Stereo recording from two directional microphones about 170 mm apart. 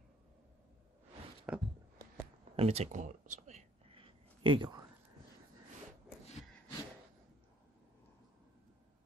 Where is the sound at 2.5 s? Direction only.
35° right (ahead or behind).